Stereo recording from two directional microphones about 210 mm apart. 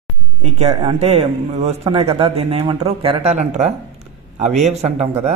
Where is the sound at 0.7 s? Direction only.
30° right (ahead or behind).